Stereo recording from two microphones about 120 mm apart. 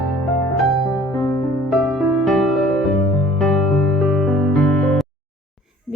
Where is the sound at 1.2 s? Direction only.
35° left (ahead or behind).